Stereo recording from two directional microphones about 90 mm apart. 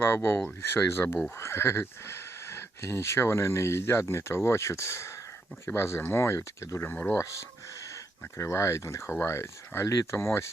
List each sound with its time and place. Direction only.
0.0 s speech: 25° left (ahead or behind)
6.9 s speech: 20° left (ahead or behind)
7.2 s speech: 35° left (ahead or behind)